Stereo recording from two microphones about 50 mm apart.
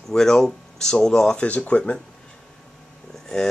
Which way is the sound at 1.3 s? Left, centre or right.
Left.